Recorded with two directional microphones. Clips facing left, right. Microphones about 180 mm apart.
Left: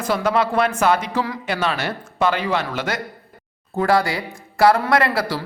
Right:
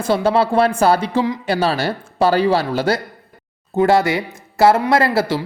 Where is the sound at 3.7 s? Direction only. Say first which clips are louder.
Right 4 dB; 25° right (ahead or behind).